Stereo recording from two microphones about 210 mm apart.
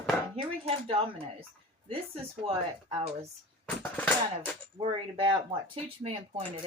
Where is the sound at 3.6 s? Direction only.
10° left (ahead or behind).